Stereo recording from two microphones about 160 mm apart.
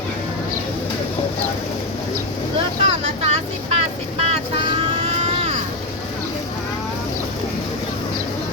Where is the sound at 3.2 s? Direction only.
40° right (ahead or behind).